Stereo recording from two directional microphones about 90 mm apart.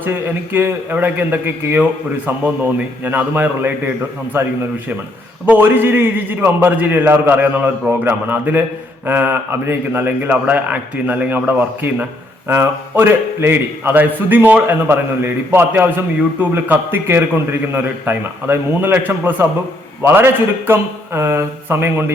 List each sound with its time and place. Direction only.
0.0 s a man's voice: 25° right (ahead or behind)